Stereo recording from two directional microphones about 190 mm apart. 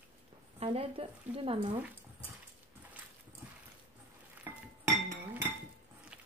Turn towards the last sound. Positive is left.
turn(degrees=-5)  # may be behind; listen again after turning